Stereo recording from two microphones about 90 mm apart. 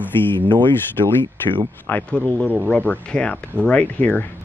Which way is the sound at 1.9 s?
20° left (ahead or behind).